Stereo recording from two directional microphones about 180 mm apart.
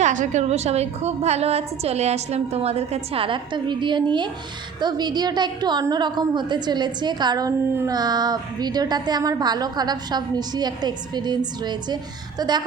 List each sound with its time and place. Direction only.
0.0 s a woman's voice: 45° right (ahead or behind); by 12.6 s 25° right (ahead or behind)